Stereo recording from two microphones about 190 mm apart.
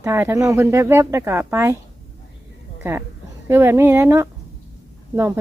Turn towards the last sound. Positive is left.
turn(degrees=-10)  # may be behind; listen again after turning